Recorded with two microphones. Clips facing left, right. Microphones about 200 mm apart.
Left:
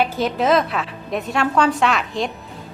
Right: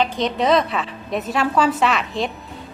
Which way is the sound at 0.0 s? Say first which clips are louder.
Even; 5° left (ahead or behind).